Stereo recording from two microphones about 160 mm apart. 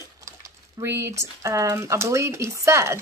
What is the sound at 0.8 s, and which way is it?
Speech, 15° right (ahead or behind).